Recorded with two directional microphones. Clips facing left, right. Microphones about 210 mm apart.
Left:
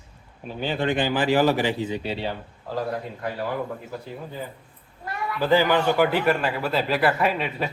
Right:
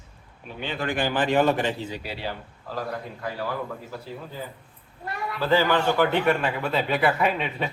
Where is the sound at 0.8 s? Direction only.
20° left (ahead or behind).